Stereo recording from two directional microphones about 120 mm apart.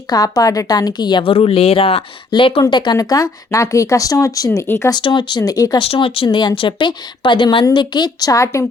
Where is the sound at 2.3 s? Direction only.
45° left (ahead or behind); by 4.9 s 25° left (ahead or behind).